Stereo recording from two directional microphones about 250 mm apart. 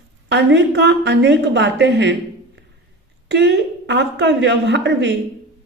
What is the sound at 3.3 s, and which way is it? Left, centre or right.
A woman's voice, right.